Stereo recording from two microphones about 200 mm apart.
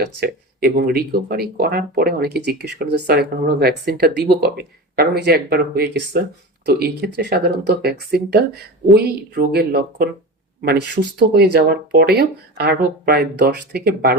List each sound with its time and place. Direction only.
0.0 s speech: 50° right (ahead or behind)